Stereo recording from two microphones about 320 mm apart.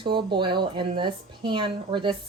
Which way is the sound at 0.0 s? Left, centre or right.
Centre.